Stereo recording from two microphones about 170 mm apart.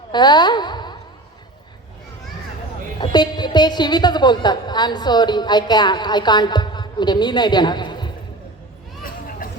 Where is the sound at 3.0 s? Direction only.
25° left (ahead or behind).